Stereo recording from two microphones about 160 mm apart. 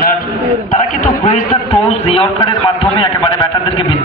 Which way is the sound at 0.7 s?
55° left (ahead or behind).